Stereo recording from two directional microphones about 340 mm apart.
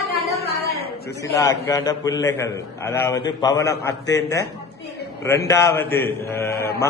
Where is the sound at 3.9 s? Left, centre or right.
Left.